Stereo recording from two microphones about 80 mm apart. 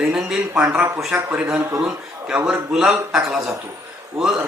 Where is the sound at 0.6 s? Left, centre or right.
Centre.